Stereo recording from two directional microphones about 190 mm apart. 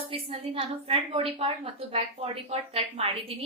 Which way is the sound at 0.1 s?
30° right (ahead or behind).